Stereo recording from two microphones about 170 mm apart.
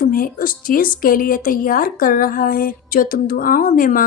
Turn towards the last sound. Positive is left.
turn(degrees=55)  # may be behind; listen again after turning